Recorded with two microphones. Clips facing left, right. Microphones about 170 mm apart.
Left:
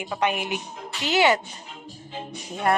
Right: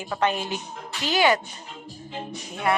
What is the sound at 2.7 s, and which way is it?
Speech, 45° left (ahead or behind).